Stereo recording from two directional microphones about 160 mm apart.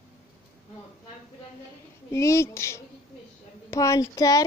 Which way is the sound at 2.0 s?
15° left (ahead or behind).